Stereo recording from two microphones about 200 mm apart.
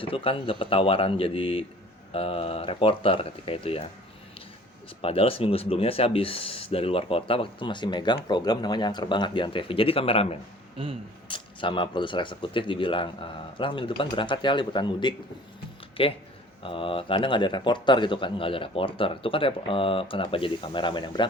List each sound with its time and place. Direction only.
0.0 s speech: 25° left (ahead or behind)
5.0 s speech: 30° left (ahead or behind)
10.8 s speech: 25° right (ahead or behind)
11.3 s speech: 25° left (ahead or behind)